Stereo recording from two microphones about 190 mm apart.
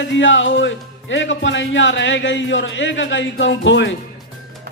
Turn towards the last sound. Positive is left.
turn(degrees=75)  # may be behind; listen again after turning